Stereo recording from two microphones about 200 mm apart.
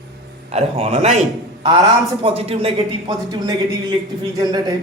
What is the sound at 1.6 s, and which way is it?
Speech, 20° right (ahead or behind).